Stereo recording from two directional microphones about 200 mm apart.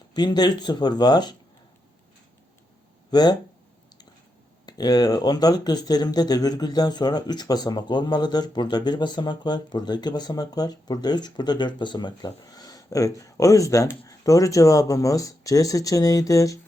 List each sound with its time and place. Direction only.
0.1 s speech: 20° left (ahead or behind)
3.1 s speech: 20° left (ahead or behind)
4.6 s speech: 20° left (ahead or behind)